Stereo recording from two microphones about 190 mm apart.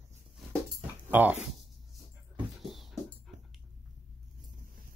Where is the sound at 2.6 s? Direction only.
Centre (ahead or behind).